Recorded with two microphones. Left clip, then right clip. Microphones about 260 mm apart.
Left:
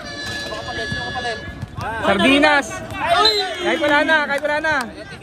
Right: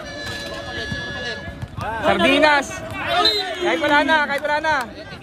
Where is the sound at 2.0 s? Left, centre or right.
Right.